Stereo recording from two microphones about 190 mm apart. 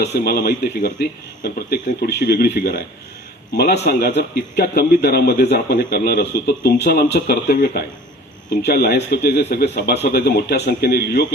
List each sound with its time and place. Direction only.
0.0 s a man's voice: 60° left (ahead or behind)